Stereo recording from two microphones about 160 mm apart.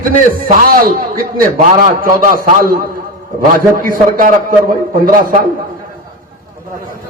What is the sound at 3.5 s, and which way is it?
Speech, 60° right (ahead or behind).